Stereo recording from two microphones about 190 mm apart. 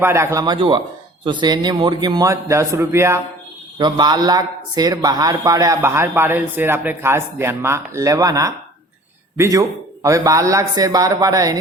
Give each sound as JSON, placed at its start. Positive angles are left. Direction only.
{"t": 0.0, "sound": "a man's voice", "side_deg": -15}